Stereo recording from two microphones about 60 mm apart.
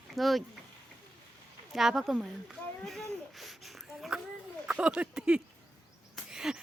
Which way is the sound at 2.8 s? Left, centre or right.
Centre.